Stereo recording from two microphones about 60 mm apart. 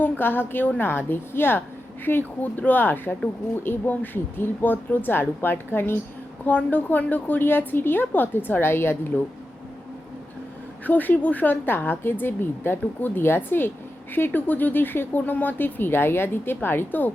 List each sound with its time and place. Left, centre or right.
0.0 s a woman's voice: left
6.4 s a woman's voice: left
10.8 s a woman's voice: left